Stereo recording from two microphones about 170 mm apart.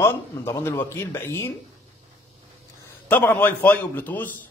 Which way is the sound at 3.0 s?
10° left (ahead or behind).